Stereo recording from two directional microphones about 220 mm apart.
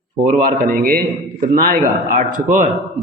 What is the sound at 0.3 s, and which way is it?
A man's voice, 40° right (ahead or behind).